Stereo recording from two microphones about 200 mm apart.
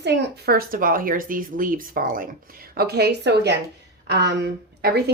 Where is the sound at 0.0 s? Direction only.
55° right (ahead or behind).